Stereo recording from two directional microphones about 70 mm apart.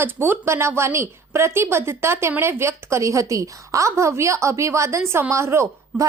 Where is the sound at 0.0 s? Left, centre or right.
Right.